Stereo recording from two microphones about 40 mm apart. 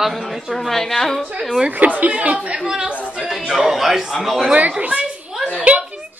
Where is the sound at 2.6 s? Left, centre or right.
Centre.